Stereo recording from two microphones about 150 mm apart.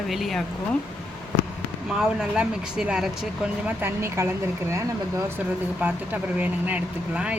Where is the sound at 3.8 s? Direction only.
15° right (ahead or behind).